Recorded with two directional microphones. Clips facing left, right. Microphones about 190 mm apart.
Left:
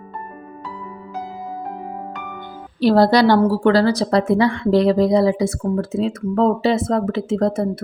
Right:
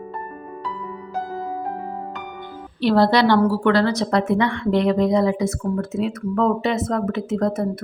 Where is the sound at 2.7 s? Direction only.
40° left (ahead or behind).